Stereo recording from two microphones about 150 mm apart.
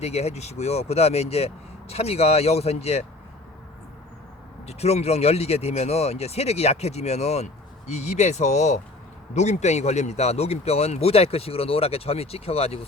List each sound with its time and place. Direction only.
0.0 s speech: 45° left (ahead or behind)
4.6 s speech: 45° left (ahead or behind)